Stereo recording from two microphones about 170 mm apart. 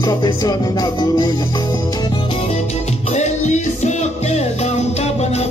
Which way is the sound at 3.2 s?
45° left (ahead or behind).